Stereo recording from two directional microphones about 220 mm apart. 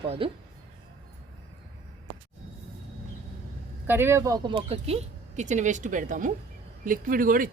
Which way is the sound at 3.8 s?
10° right (ahead or behind).